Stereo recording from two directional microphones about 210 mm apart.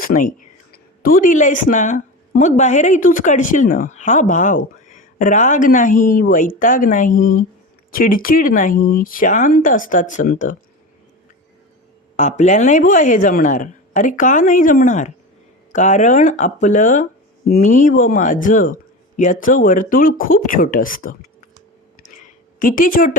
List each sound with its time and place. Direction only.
0.0 s speech: 40° left (ahead or behind)
12.1 s speech: 35° left (ahead or behind)
22.0 s a sound: 40° left (ahead or behind)